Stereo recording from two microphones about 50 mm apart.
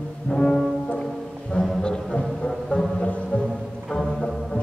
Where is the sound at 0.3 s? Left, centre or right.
Centre.